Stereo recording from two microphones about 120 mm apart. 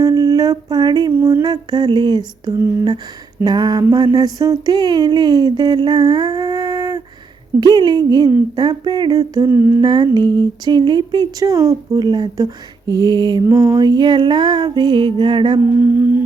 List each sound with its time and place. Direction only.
0.0 s a sound: 30° right (ahead or behind)
1.1 s music: 20° right (ahead or behind)
1.5 s speech: 35° right (ahead or behind)
9.8 s speech: 35° right (ahead or behind)
13.5 s speech: 25° right (ahead or behind); by 15.6 s 40° right (ahead or behind)
15.6 s music: 20° right (ahead or behind)